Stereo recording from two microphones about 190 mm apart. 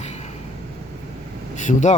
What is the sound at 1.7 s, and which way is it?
Speech, 40° left (ahead or behind).